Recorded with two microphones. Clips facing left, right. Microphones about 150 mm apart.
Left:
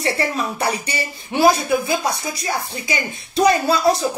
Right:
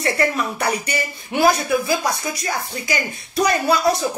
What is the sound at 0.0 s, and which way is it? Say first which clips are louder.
Speech: right 1 dB; 25° left (ahead or behind).